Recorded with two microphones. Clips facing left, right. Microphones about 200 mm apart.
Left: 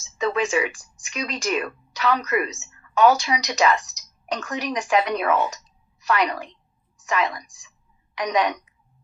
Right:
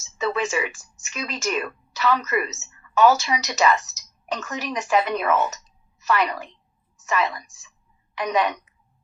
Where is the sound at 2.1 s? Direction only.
10° left (ahead or behind).